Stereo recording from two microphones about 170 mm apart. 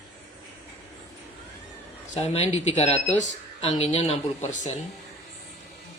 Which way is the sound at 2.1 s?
40° left (ahead or behind).